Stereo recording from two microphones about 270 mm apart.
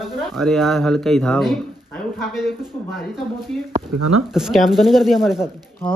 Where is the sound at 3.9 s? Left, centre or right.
Right.